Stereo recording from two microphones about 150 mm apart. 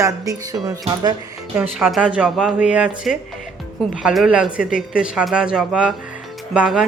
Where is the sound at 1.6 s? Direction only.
Centre (ahead or behind).